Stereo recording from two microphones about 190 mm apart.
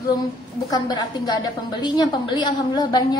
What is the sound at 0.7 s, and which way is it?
A woman's voice, 20° left (ahead or behind).